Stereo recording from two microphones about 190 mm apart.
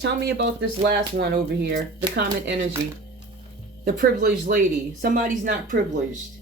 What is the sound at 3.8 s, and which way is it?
Speech, 55° right (ahead or behind).